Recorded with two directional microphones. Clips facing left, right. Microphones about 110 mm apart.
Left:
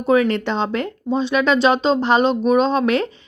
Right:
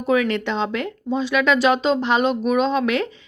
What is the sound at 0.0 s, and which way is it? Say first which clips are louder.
A woman's voice: left 3 dB; 35° left (ahead or behind).